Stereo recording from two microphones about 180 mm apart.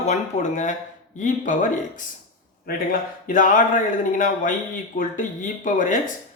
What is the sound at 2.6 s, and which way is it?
Speech, 50° left (ahead or behind).